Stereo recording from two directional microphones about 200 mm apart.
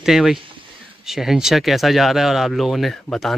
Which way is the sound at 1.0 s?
Centre (ahead or behind).